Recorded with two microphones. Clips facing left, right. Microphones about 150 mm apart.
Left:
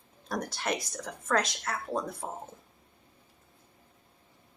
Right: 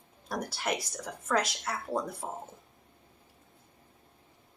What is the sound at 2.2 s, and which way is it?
Speech, 10° left (ahead or behind).